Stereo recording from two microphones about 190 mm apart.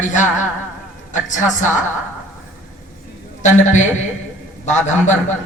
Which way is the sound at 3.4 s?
40° left (ahead or behind).